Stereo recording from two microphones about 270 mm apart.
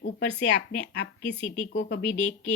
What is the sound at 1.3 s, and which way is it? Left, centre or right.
Speech, left.